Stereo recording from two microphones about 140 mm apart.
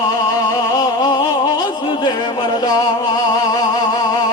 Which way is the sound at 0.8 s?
30° left (ahead or behind).